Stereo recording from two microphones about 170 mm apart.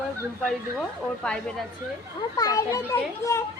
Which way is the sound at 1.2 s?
5° left (ahead or behind).